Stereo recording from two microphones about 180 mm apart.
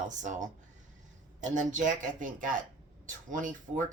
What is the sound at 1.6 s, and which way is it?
Speech, 45° right (ahead or behind).